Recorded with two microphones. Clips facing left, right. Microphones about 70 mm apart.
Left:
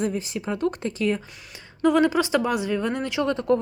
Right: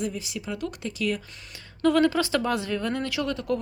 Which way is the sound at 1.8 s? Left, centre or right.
Centre.